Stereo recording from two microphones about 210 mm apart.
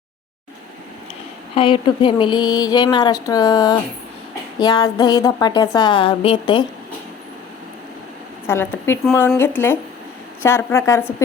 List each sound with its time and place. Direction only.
1.5 s speech: 25° left (ahead or behind)
8.4 s a woman's voice: 10° left (ahead or behind)